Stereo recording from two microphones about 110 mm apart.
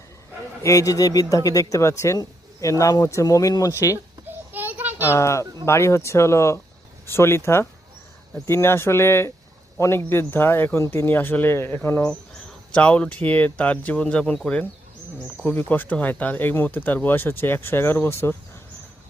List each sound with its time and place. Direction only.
0.6 s speech: 30° left (ahead or behind)
3.9 s a sound: 20° right (ahead or behind)
4.9 s a child's voice: 25° left (ahead or behind)